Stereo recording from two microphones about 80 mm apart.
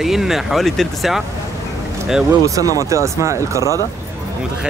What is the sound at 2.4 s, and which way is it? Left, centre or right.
Speech, right.